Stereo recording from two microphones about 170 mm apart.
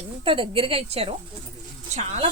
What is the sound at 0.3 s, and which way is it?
Speech, 30° right (ahead or behind).